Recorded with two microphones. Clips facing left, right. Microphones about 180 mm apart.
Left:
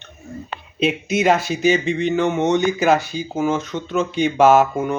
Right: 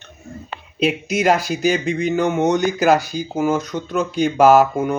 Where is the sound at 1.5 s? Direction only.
Centre (ahead or behind).